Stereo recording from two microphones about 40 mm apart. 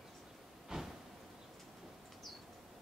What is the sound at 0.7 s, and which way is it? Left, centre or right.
Vehicle, centre.